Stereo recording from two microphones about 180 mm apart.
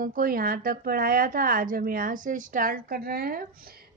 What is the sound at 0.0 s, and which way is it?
A woman's voice, 50° right (ahead or behind).